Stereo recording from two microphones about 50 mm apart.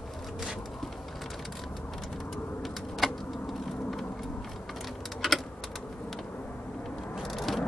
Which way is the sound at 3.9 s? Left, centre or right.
Centre.